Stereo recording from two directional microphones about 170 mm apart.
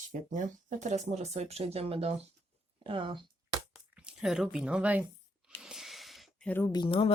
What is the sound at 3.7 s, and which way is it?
Speech, 5° right (ahead or behind).